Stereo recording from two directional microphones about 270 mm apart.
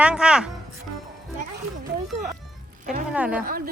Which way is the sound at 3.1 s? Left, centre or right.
Centre.